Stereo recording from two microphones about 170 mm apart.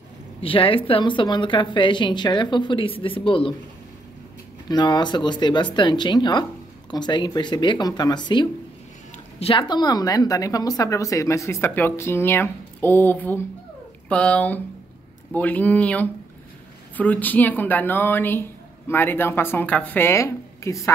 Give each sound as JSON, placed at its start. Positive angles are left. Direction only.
{"t": 0.4, "sound": "speech", "side_deg": 30}
{"t": 4.6, "sound": "a woman's voice", "side_deg": 25}